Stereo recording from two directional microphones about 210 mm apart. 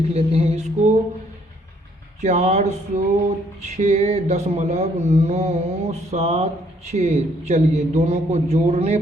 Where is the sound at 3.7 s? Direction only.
35° right (ahead or behind).